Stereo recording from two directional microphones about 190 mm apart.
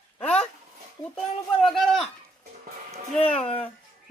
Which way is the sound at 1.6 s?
Centre (ahead or behind).